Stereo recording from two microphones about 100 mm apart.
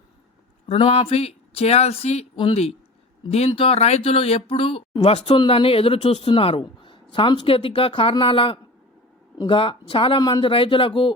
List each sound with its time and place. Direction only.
0.7 s speech: 65° left (ahead or behind); by 2.2 s 90° left
2.3 s speech: 55° left (ahead or behind)
3.3 s speech: 80° left
5.0 s speech: 90° left
5.5 s a man's voice: 70° left (ahead or behind)